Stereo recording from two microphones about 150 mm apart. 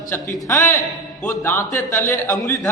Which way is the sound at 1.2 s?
15° left (ahead or behind).